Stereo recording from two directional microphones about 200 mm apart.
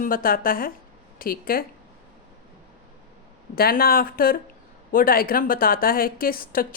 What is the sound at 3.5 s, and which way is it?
A woman's voice, 50° left (ahead or behind).